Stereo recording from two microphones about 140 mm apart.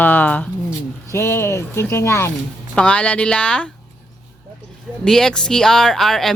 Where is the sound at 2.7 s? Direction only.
10° left (ahead or behind).